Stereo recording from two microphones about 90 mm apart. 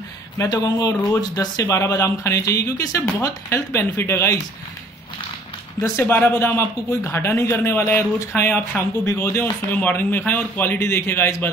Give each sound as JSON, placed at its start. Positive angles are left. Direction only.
{"t": 0.5, "sound": "speech", "side_deg": 45}
{"t": 5.8, "sound": "speech", "side_deg": 25}